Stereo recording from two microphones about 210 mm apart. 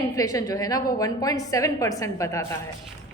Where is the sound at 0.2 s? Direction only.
15° left (ahead or behind).